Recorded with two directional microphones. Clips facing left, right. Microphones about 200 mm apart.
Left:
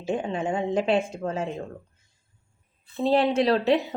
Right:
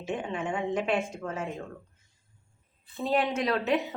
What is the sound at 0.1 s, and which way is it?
Speech, 30° left (ahead or behind).